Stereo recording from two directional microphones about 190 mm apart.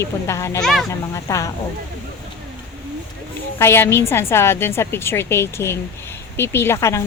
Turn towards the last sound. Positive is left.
turn(degrees=15)  # may be behind; listen again after turning